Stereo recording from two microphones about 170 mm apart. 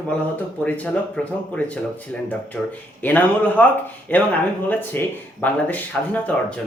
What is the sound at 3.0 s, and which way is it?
Speech, 10° left (ahead or behind).